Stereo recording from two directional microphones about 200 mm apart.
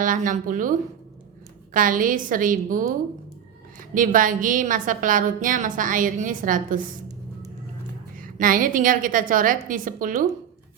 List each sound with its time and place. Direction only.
0.0 s a woman's voice: 40° right (ahead or behind)
3.9 s a woman's voice: 40° right (ahead or behind)
8.1 s a woman's voice: 45° right (ahead or behind)